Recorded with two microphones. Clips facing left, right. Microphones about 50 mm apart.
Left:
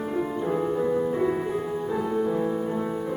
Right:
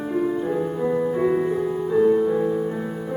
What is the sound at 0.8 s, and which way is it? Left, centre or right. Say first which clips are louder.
Music: right 7 dB; centre.